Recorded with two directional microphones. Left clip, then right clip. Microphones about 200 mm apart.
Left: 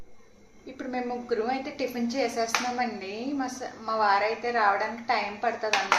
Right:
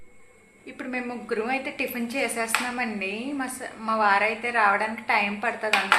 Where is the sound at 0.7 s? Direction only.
20° right (ahead or behind).